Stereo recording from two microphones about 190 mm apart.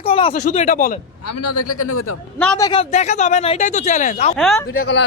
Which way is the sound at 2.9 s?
40° left (ahead or behind).